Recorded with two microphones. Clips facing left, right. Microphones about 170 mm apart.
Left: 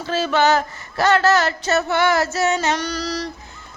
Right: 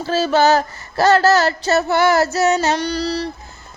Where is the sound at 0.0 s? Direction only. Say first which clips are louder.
Right 3 dB; 35° right (ahead or behind).